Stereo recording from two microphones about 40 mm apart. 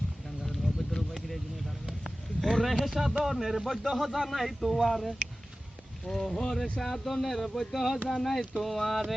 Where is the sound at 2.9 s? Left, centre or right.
Centre.